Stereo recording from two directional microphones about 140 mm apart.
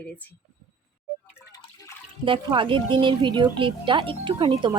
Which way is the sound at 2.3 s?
35° right (ahead or behind).